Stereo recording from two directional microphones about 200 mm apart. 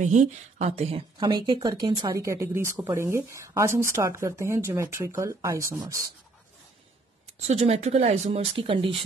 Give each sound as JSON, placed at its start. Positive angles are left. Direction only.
{"t": 0.0, "sound": "a woman's voice", "side_deg": -35}
{"t": 7.3, "sound": "speech", "side_deg": -30}